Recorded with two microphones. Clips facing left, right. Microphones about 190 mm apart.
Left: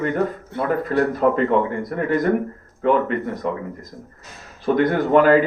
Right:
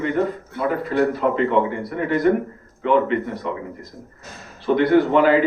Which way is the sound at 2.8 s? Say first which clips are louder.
Even; 45° left (ahead or behind).